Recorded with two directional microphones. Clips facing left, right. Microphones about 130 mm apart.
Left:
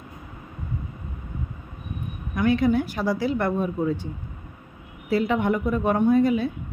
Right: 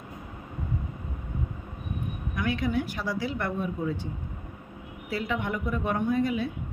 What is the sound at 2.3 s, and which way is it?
A woman's voice, 35° left (ahead or behind).